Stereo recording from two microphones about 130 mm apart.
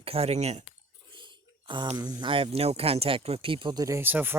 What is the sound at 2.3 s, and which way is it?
Speech, 45° right (ahead or behind).